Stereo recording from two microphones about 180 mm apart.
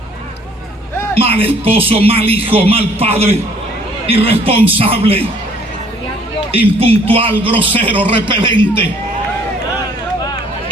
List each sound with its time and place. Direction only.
1.1 s speech: 30° right (ahead or behind)
6.7 s a man's voice: 30° right (ahead or behind)